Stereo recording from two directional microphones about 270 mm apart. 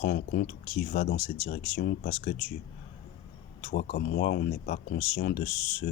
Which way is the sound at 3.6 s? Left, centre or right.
Left.